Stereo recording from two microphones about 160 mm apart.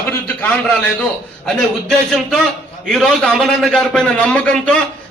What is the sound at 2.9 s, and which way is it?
A man's voice, 5° left (ahead or behind).